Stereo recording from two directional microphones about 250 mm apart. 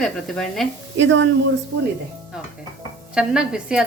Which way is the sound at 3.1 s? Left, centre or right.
Centre.